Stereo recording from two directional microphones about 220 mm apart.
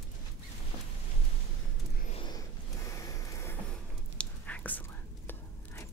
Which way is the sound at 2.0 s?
25° left (ahead or behind).